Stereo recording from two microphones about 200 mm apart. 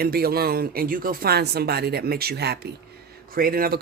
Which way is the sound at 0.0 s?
50° right (ahead or behind).